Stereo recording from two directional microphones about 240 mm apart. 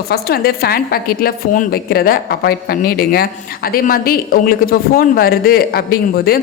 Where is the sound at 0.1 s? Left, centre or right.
Left.